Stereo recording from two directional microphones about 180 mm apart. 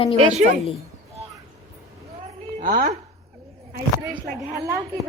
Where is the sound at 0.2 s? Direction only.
40° right (ahead or behind).